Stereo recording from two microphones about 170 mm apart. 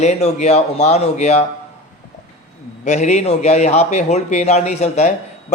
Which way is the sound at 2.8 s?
45° left (ahead or behind).